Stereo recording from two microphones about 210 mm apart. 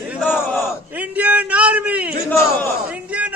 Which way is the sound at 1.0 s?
5° right (ahead or behind).